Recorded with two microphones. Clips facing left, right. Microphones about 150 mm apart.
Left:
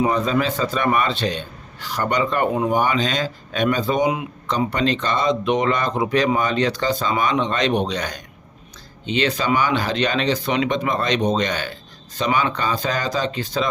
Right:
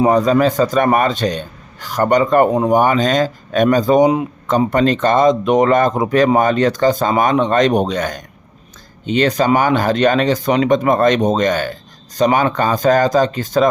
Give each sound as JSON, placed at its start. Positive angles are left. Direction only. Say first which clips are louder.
{"t": 0.0, "sound": "a man's voice", "louder": "right 7 dB", "side_deg": -45}